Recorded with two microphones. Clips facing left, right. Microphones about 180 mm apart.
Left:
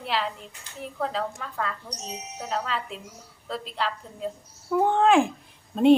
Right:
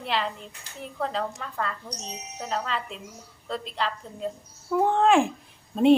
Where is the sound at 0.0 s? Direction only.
5° left (ahead or behind).